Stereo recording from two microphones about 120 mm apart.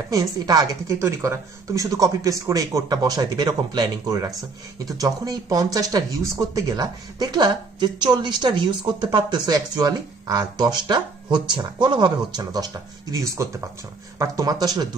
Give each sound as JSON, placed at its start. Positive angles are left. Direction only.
{"t": 0.1, "sound": "a woman's voice", "side_deg": -30}